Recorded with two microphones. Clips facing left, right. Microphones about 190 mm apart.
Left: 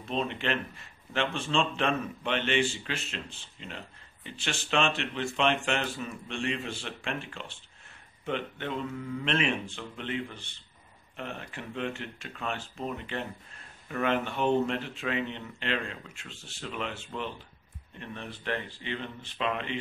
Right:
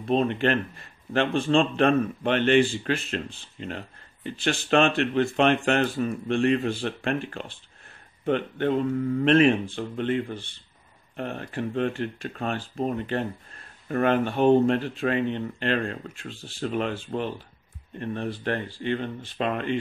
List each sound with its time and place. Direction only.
0.0 s speech: 50° right (ahead or behind)
16.3 s speech: 35° right (ahead or behind)
16.6 s speech: 45° right (ahead or behind)